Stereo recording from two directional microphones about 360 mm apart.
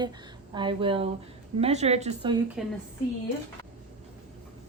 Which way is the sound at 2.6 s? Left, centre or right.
Centre.